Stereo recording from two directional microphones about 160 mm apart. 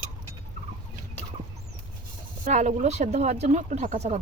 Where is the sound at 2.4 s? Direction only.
50° right (ahead or behind).